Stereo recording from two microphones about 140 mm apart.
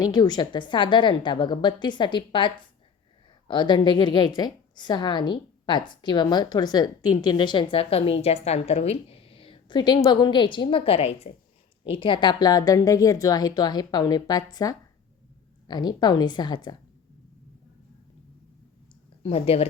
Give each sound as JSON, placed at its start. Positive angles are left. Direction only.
{"t": 0.0, "sound": "a woman's voice", "side_deg": 30}
{"t": 19.2, "sound": "speech", "side_deg": 45}